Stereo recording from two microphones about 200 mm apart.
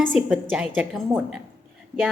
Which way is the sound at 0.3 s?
5° right (ahead or behind).